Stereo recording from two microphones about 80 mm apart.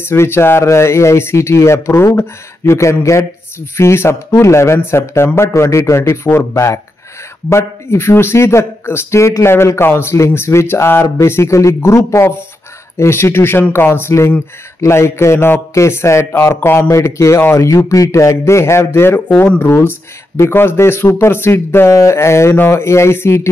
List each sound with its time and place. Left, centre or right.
0.0 s a man's voice: left
7.4 s a man's voice: left